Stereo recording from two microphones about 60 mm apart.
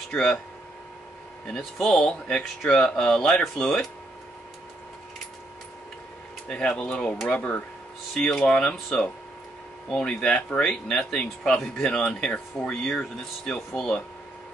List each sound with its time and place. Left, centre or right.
1.5 s speech: centre
1.9 s speech: centre
6.4 s speech: centre
7.2 s speech: left
8.1 s speech: centre